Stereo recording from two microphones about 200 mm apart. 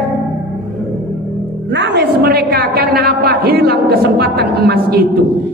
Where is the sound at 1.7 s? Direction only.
60° right (ahead or behind).